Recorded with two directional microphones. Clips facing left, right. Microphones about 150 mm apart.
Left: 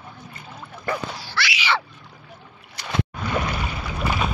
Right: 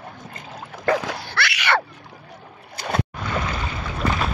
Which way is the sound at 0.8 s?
75° right (ahead or behind).